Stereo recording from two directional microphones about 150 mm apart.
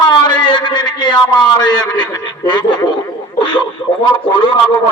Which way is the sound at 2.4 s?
30° left (ahead or behind).